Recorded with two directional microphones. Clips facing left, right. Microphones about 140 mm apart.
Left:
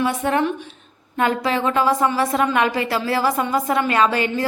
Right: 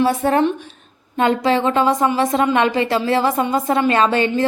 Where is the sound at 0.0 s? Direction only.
35° right (ahead or behind).